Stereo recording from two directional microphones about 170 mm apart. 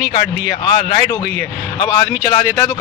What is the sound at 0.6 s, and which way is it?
Speech, 30° left (ahead or behind).